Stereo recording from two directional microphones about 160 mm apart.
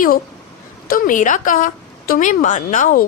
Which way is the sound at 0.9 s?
60° left (ahead or behind).